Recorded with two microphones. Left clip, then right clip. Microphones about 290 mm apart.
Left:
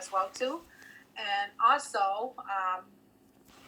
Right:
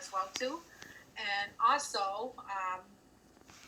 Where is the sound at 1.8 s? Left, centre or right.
Centre.